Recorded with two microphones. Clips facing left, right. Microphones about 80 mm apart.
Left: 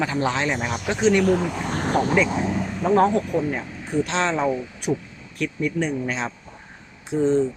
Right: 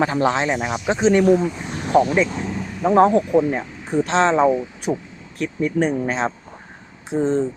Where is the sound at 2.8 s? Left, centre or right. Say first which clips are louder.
Right 4 dB; centre.